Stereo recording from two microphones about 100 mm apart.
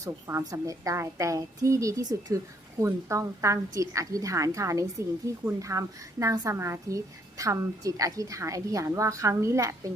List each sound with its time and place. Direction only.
0.0 s a woman's voice: 30° right (ahead or behind)